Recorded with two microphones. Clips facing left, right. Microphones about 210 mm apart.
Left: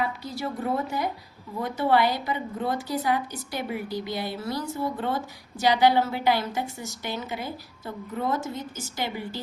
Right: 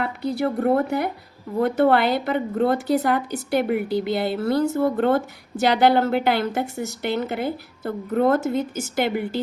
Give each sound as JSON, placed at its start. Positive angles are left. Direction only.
{"t": 0.0, "sound": "speech", "side_deg": -60}